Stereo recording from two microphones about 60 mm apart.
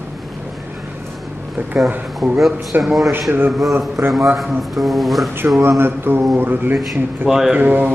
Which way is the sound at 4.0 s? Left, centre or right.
Right.